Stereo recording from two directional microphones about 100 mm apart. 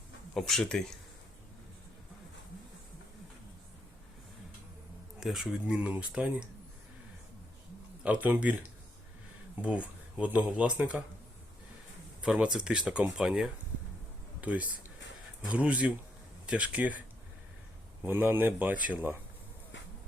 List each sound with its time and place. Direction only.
0.3 s speech: 5° left (ahead or behind)
5.2 s speech: centre (ahead or behind)
8.0 s speech: 15° right (ahead or behind)
9.6 s speech: 15° right (ahead or behind)
12.2 s speech: 10° right (ahead or behind)
18.0 s speech: 20° right (ahead or behind)